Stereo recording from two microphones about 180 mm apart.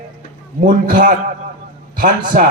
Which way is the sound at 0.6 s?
45° right (ahead or behind).